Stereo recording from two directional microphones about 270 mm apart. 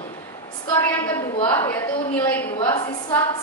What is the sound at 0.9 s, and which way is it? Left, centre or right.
A woman's voice, centre.